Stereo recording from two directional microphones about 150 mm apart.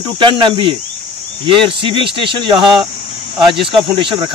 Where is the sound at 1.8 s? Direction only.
35° right (ahead or behind).